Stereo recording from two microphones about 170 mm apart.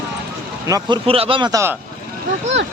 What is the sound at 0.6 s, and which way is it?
Speech, 20° right (ahead or behind).